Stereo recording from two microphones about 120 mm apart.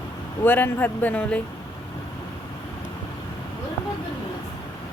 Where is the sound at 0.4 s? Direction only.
15° left (ahead or behind).